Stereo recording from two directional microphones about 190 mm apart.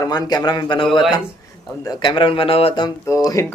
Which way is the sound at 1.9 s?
25° left (ahead or behind).